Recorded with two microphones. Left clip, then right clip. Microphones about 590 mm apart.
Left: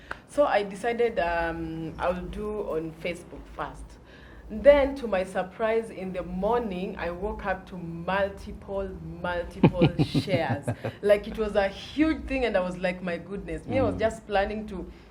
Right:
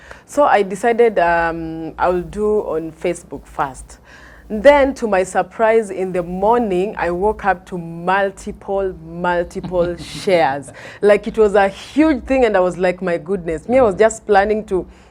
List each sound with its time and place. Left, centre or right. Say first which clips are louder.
0.3 s speech: right 10 dB; right